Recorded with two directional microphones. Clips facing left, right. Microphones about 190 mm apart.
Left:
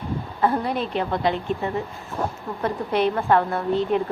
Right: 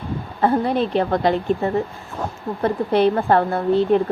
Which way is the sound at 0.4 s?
30° right (ahead or behind).